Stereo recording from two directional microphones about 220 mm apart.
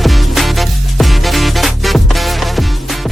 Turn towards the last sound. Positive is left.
turn(degrees=0)  # may be behind; listen again after turning